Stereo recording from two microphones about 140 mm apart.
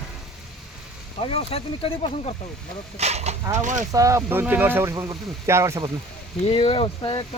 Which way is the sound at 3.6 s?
65° right (ahead or behind).